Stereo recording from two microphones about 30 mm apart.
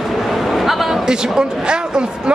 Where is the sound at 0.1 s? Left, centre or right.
Centre.